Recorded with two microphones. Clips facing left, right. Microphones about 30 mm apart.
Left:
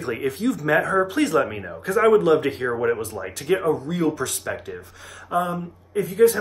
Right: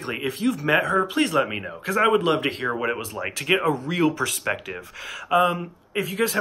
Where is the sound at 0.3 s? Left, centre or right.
Right.